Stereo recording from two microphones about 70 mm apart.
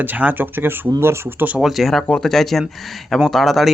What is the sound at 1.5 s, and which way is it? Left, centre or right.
Speech, centre.